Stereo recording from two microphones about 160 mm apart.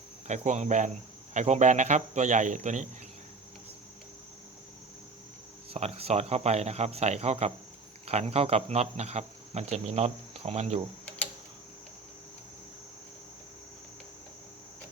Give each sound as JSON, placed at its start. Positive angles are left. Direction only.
{"t": 0.3, "sound": "speech", "side_deg": -45}
{"t": 5.7, "sound": "speech", "side_deg": -40}